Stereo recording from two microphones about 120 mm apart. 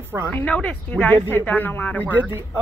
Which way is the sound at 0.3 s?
15° left (ahead or behind).